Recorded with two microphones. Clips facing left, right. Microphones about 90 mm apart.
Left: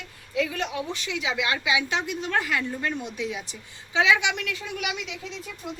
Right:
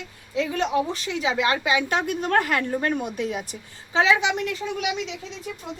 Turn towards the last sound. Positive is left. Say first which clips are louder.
# right 5 dB
turn(degrees=-35)  # may be behind; listen again after turning